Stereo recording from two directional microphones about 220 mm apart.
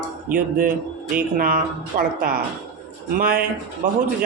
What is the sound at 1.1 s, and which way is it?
Speech, 40° right (ahead or behind).